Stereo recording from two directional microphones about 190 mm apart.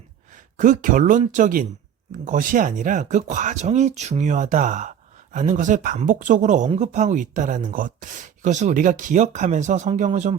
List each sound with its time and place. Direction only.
0.5 s speech: 45° right (ahead or behind)